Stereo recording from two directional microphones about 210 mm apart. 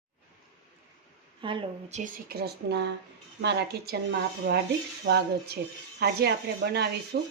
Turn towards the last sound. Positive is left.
turn(degrees=-50)  # may be behind; listen again after turning